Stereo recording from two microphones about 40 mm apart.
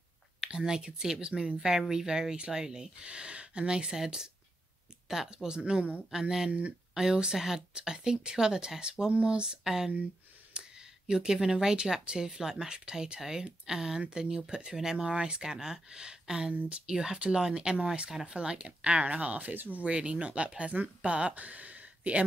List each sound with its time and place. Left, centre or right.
0.4 s speech: centre
3.0 s speech: right
5.0 s a sound: centre
5.3 s speech: centre
10.6 s a sound: right
11.1 s speech: centre; by 19.5 s right
19.5 s speech: right
19.8 s speech: right